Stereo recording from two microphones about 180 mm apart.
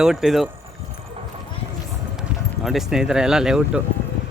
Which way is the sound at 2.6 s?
Centre (ahead or behind).